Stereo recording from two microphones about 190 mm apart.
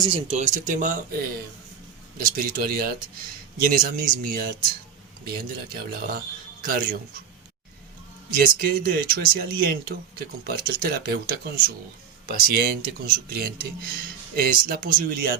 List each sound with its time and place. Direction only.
0.0 s speech: 30° right (ahead or behind)
2.1 s speech: 50° right (ahead or behind)
5.9 s speech: 50° right (ahead or behind)
8.3 s speech: 50° right (ahead or behind)